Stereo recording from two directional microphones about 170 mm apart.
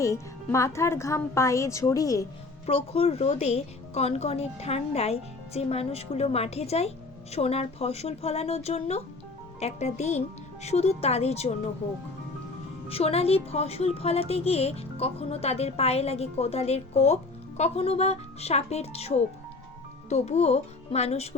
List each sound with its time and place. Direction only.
0.0 s speech: 15° left (ahead or behind)
2.6 s a woman's voice: 35° left (ahead or behind)
12.9 s a woman's voice: 35° left (ahead or behind)